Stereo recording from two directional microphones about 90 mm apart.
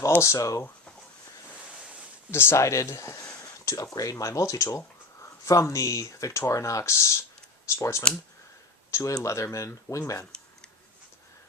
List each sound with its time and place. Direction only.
0.2 s speech: 35° left (ahead or behind)
1.5 s ocean: 10° right (ahead or behind)
2.3 s speech: 30° left (ahead or behind)